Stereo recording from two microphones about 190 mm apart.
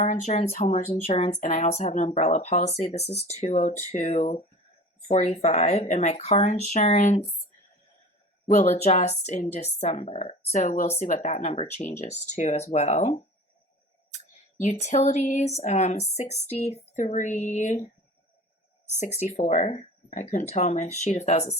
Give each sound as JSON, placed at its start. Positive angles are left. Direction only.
{"t": 0.0, "sound": "a woman's voice", "side_deg": 35}
{"t": 8.4, "sound": "a woman's voice", "side_deg": 35}
{"t": 14.6, "sound": "a woman's voice", "side_deg": 35}
{"t": 18.9, "sound": "a woman's voice", "side_deg": 40}